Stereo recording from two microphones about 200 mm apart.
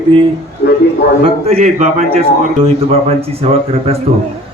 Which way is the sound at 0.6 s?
50° left (ahead or behind).